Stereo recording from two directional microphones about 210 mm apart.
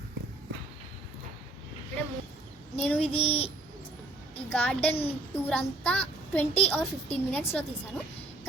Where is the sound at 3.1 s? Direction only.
30° left (ahead or behind).